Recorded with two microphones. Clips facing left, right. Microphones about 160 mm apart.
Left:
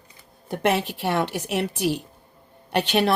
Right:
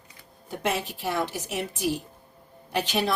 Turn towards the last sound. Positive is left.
turn(degrees=65)  # may be behind; listen again after turning